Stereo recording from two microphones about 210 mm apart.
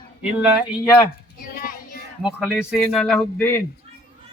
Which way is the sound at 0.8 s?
20° left (ahead or behind).